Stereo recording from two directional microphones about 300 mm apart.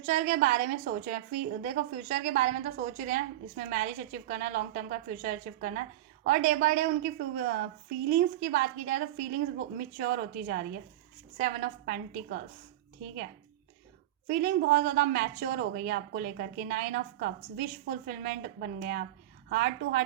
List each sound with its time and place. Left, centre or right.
0.0 s a woman's voice: right
14.3 s a woman's voice: right